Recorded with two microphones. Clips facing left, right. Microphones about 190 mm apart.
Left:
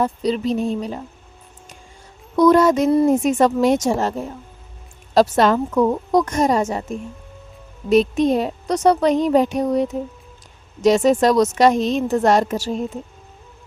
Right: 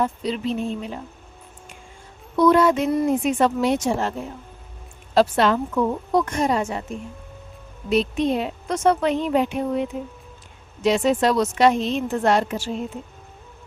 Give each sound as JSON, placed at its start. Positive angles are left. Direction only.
{"t": 0.0, "sound": "a woman's voice", "side_deg": 40}
{"t": 2.3, "sound": "a woman's voice", "side_deg": 40}
{"t": 5.1, "sound": "a woman's voice", "side_deg": 40}
{"t": 7.9, "sound": "a woman's voice", "side_deg": 45}